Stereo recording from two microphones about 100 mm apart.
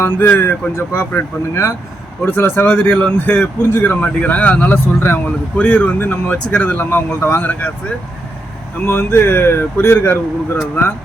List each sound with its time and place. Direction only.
0.0 s speech: 20° left (ahead or behind)